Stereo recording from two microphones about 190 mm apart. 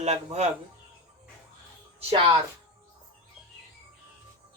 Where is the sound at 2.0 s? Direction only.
30° right (ahead or behind).